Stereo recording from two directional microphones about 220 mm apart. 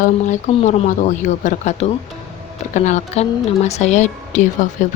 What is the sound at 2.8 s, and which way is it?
A woman's voice, 30° left (ahead or behind).